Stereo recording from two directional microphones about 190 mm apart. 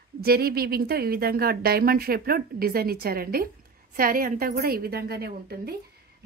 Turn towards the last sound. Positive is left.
turn(degrees=-55)  # may be behind; listen again after turning